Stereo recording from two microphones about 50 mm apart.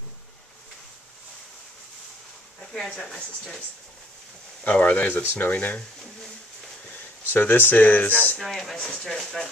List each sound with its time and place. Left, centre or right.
2.7 s speech: centre
3.0 s speech: centre
4.6 s speech: left
5.2 s speech: left
5.5 s speech: left
7.2 s speech: left
8.4 s speech: centre